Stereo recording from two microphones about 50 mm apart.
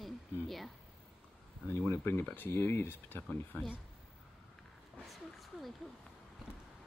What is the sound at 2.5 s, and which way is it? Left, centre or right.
Speech, left.